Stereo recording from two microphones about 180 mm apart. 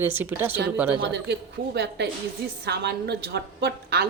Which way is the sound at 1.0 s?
70° right (ahead or behind).